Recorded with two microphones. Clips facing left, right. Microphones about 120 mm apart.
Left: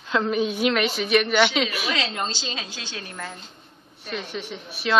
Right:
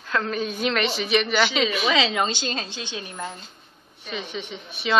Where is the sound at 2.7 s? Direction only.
20° right (ahead or behind).